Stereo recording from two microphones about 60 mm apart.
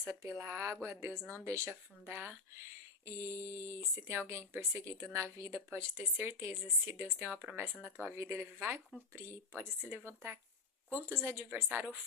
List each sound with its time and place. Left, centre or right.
0.0 s speech: right
5.9 s speech: right